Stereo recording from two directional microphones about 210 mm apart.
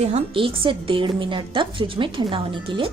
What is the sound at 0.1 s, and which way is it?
A woman's voice, 25° right (ahead or behind).